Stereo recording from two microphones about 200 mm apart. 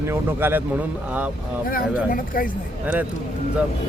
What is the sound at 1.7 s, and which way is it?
Speech, 45° left (ahead or behind).